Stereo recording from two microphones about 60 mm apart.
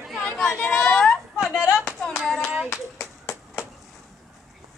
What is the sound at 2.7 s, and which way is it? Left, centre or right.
Clapping, left.